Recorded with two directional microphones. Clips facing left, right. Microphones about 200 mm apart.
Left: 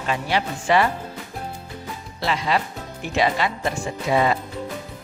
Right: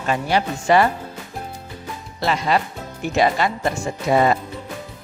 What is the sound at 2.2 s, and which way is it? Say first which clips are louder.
Speech: right 3 dB; 45° right (ahead or behind).